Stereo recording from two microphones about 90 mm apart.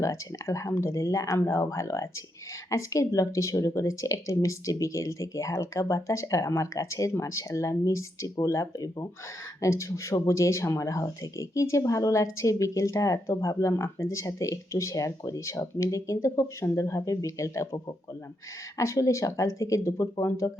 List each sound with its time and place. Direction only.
0.0 s speech: 35° left (ahead or behind)
18.8 s speech: 35° left (ahead or behind)